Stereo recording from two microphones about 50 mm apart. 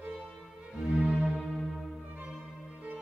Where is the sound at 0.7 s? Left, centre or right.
Centre.